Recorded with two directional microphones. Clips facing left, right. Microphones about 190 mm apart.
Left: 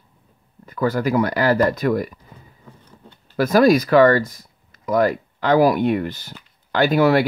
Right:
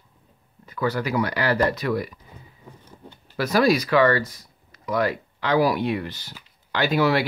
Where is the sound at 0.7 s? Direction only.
45° left (ahead or behind).